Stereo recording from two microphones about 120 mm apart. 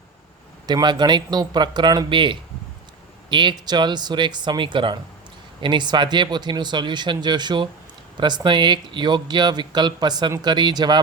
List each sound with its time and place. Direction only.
0.7 s speech: 35° right (ahead or behind)